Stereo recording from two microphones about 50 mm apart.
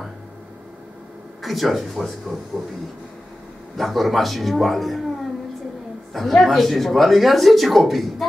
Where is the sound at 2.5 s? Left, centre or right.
Right.